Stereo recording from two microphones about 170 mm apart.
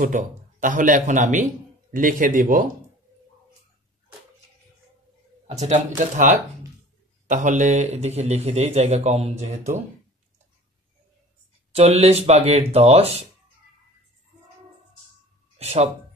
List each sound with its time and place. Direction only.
0.0 s speech: 50° right (ahead or behind)
5.5 s a man's voice: 40° right (ahead or behind)
11.7 s a man's voice: 40° right (ahead or behind)
15.5 s speech: 40° right (ahead or behind)